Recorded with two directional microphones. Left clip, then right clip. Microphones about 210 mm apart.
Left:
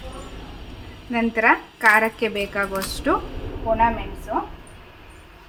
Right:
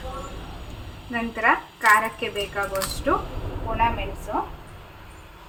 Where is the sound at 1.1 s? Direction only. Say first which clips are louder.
Left 3 dB; 45° left (ahead or behind).